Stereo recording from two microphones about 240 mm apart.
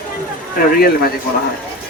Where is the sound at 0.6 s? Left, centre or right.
Left.